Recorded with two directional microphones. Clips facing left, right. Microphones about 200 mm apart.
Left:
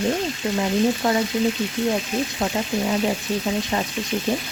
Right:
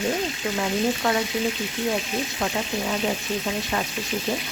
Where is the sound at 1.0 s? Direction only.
20° left (ahead or behind).